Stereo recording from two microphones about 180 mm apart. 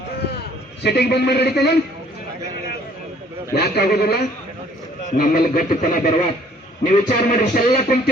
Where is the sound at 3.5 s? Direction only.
60° left (ahead or behind).